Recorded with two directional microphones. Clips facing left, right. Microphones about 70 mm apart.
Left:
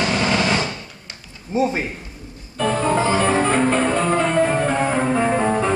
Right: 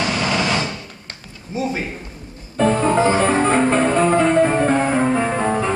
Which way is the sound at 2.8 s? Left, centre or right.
Right.